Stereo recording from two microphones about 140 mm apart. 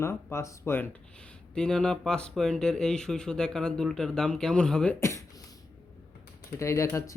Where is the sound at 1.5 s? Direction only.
5° left (ahead or behind).